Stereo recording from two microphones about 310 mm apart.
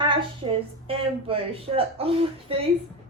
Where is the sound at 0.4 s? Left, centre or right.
Centre.